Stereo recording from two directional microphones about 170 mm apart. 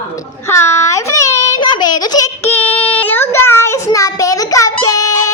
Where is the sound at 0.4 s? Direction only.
15° left (ahead or behind).